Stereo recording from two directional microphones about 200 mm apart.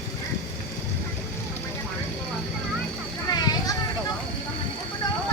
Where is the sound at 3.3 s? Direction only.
20° left (ahead or behind).